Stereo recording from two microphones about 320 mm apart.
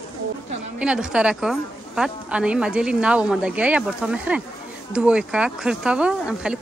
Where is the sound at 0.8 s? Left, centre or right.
Centre.